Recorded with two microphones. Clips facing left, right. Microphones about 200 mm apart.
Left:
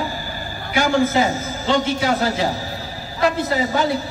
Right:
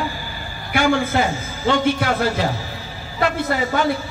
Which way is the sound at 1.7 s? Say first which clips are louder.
Even; 60° right (ahead or behind).